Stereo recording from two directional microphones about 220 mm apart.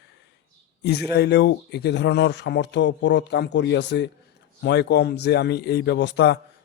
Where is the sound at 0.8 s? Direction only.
50° left (ahead or behind).